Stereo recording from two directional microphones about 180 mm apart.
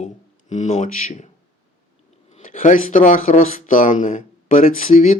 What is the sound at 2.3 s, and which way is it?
Speech, 45° left (ahead or behind).